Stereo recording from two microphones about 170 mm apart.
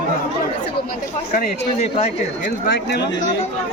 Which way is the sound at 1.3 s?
45° left (ahead or behind).